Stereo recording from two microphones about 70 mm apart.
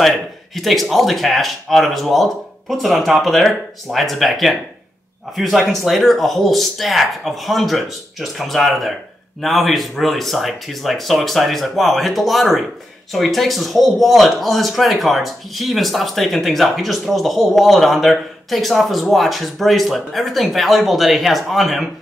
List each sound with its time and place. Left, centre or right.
0.0 s speech: centre